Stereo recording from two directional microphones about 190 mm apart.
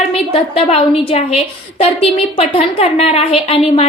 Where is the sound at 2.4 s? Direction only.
30° left (ahead or behind).